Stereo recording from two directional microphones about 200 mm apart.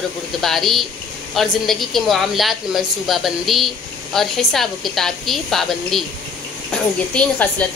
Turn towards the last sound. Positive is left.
turn(degrees=5)  # may be behind; listen again after turning